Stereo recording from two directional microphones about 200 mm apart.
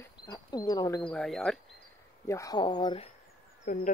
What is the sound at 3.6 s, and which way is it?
Speech, 40° left (ahead or behind).